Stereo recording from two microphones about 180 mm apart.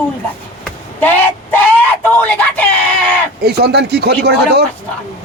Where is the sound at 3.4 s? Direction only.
60° right (ahead or behind).